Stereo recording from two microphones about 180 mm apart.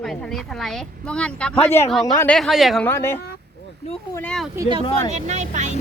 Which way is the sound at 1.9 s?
Centre (ahead or behind).